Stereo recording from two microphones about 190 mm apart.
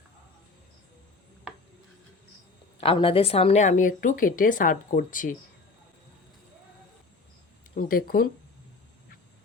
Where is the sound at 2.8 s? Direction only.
30° left (ahead or behind); by 5.4 s 45° left (ahead or behind).